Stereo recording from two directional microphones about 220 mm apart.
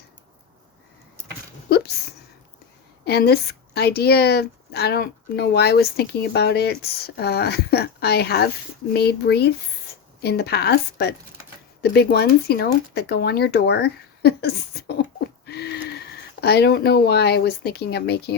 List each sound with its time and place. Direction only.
3.0 s a woman's voice: 45° left (ahead or behind)